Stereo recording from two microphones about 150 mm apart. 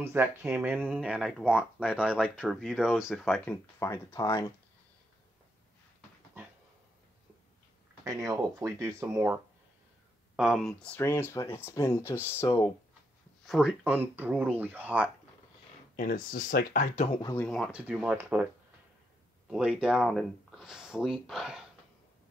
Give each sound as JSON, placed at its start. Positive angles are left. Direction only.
{"t": 0.0, "sound": "speech", "side_deg": -15}
{"t": 3.4, "sound": "speech", "side_deg": 20}
{"t": 8.0, "sound": "speech", "side_deg": -20}
{"t": 10.3, "sound": "speech", "side_deg": 0}
{"t": 13.5, "sound": "speech", "side_deg": -5}
{"t": 16.0, "sound": "speech", "side_deg": 70}
{"t": 16.9, "sound": "speech", "side_deg": 45}
{"t": 17.4, "sound": "speech", "side_deg": 5}
{"t": 17.7, "sound": "speech", "side_deg": -10}
{"t": 19.5, "sound": "speech", "side_deg": -5}